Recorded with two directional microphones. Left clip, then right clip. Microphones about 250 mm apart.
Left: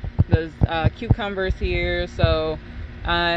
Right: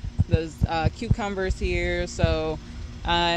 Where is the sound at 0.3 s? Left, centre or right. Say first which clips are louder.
Left 3 dB; centre.